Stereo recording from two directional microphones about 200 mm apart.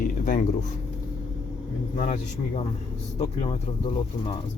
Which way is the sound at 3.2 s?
30° left (ahead or behind).